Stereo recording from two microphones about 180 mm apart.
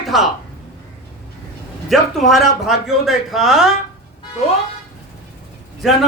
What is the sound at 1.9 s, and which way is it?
A man's voice, centre (ahead or behind).